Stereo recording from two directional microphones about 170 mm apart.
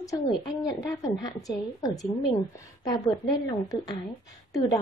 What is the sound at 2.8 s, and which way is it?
A woman's voice, 20° left (ahead or behind).